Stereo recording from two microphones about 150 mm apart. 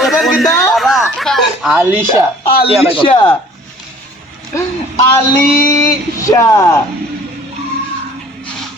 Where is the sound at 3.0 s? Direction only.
35° left (ahead or behind).